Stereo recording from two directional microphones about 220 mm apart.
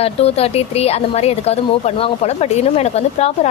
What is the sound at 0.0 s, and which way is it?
Speech, 25° left (ahead or behind).